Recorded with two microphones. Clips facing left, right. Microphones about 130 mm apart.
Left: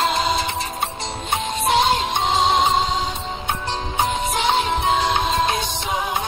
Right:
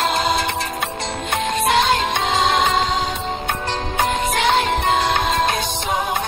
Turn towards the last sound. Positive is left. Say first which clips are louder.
# right 1 dB
turn(degrees=-70)  # may be behind; listen again after turning